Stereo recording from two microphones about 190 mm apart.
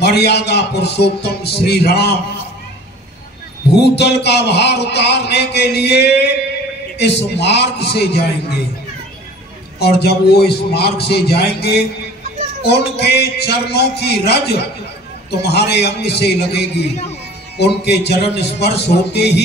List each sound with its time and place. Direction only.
0.0 s a man's voice: 60° left (ahead or behind)
3.8 s a man's voice: 60° left (ahead or behind)
9.8 s a man's voice: 55° left (ahead or behind)